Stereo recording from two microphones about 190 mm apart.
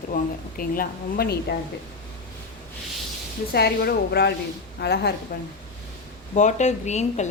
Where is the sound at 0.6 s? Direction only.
50° left (ahead or behind).